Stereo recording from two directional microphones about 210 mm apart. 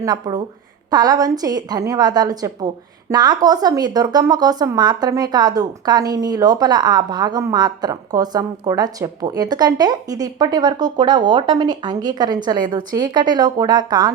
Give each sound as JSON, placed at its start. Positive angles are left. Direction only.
{"t": 0.0, "sound": "a woman's voice", "side_deg": -20}